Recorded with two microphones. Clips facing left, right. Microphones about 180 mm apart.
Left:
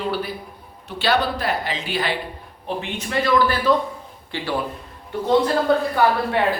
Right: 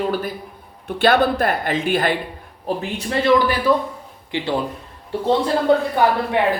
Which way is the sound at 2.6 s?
35° right (ahead or behind).